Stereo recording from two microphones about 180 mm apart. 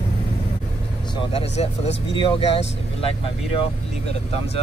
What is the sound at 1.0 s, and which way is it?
Speech, 25° left (ahead or behind).